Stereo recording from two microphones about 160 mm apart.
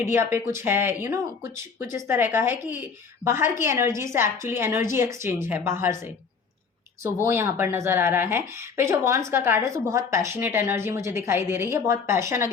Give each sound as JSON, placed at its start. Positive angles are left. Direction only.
{"t": 0.0, "sound": "speech", "side_deg": -15}
{"t": 7.3, "sound": "speech", "side_deg": -15}